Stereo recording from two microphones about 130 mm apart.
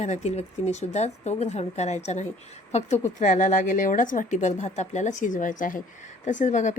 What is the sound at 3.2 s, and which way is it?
A woman's voice, 70° left (ahead or behind).